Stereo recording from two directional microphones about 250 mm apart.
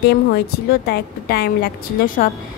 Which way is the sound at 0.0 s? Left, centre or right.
Left.